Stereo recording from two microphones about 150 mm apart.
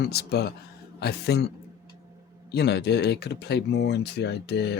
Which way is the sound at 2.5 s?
90° left.